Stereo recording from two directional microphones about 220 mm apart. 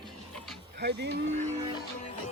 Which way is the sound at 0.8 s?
50° right (ahead or behind).